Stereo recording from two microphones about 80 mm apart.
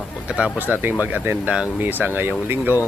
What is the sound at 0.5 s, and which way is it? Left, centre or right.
Speech, right.